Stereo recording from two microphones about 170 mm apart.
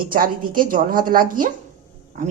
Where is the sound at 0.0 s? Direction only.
60° right (ahead or behind).